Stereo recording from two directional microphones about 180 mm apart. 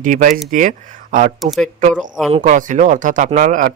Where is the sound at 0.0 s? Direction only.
50° right (ahead or behind).